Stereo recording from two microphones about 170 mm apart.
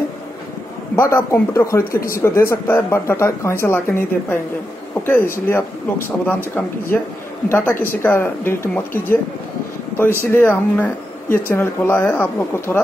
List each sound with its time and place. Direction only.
0.9 s speech: 15° left (ahead or behind)
10.2 s speech: 15° left (ahead or behind)